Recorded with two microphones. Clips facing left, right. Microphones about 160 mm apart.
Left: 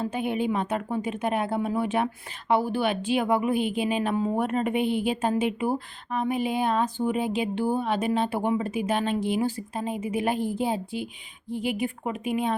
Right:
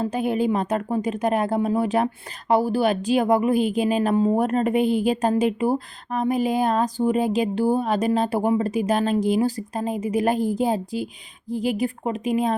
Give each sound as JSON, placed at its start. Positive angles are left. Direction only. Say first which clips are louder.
{"t": 0.0, "sound": "a woman's voice", "louder": "right 5 dB", "side_deg": -40}